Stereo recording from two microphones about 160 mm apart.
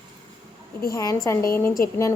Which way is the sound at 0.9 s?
25° left (ahead or behind).